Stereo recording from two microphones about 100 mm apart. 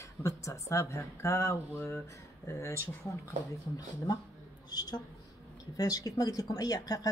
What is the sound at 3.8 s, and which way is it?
A woman's voice, 40° left (ahead or behind).